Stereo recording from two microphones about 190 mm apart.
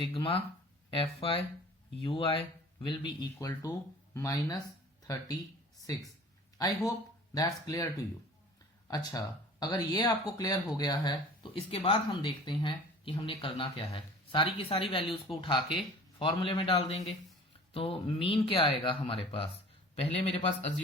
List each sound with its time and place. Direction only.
0.0 s speech: 30° left (ahead or behind)
6.6 s speech: 20° left (ahead or behind)